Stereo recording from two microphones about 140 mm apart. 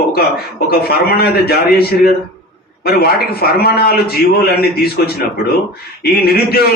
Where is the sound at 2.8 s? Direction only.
90° left.